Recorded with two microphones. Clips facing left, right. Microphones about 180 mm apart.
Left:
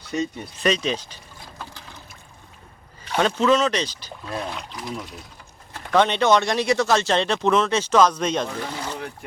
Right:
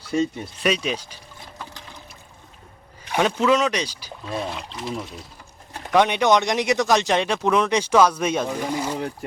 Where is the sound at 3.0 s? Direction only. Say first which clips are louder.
Even; 15° right (ahead or behind).